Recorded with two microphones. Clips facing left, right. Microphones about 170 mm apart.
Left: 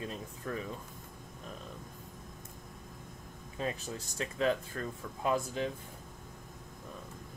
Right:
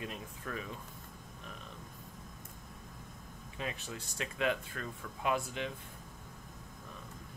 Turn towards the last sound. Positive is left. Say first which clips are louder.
# left 3 dB
turn(degrees=35)  # may be behind; listen again after turning